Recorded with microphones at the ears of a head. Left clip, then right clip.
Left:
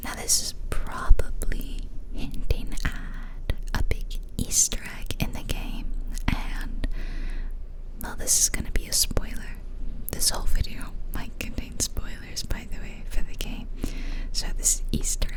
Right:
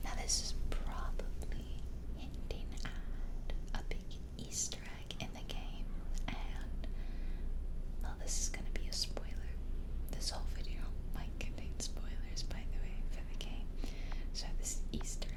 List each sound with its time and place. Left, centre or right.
0.0 s whispering: left